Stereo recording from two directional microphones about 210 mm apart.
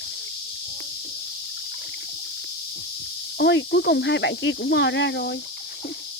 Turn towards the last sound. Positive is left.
turn(degrees=55)  # may be behind; listen again after turning